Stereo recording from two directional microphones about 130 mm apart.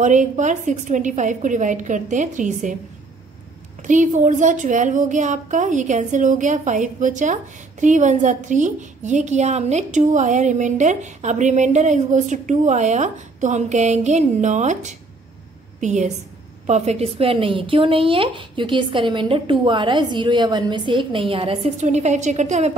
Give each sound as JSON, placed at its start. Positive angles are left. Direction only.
{"t": 0.0, "sound": "a woman's voice", "side_deg": -70}
{"t": 3.8, "sound": "a woman's voice", "side_deg": -75}
{"t": 21.7, "sound": "a woman's voice", "side_deg": -65}